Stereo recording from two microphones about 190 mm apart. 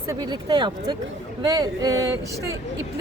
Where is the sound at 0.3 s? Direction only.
25° right (ahead or behind).